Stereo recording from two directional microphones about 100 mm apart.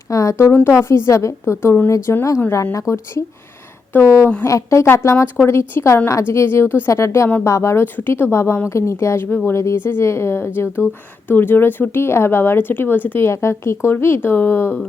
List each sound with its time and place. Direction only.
0.1 s speech: 30° left (ahead or behind)
3.9 s speech: 20° left (ahead or behind)
4.4 s speech: 30° left (ahead or behind)